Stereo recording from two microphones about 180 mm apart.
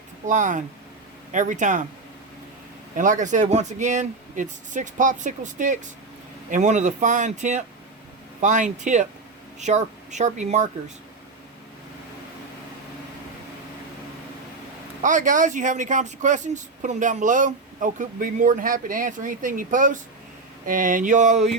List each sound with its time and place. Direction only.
0.3 s speech: 45° right (ahead or behind)
2.9 s speech: 45° right (ahead or behind)
15.0 s speech: 45° right (ahead or behind)